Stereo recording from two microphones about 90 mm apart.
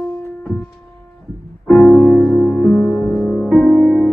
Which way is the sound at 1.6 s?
10° left (ahead or behind).